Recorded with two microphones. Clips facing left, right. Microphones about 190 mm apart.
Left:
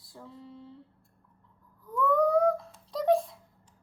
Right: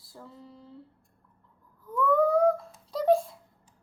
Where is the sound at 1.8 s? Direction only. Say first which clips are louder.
Right 1 dB; centre (ahead or behind).